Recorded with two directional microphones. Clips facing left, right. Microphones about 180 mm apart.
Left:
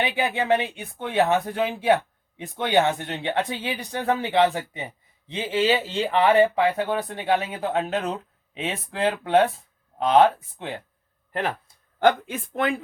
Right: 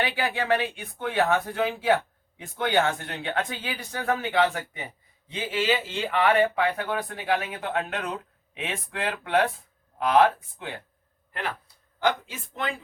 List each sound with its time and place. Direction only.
0.0 s speech: 20° left (ahead or behind)
11.3 s speech: 45° left (ahead or behind)
11.9 s speech: 55° left (ahead or behind)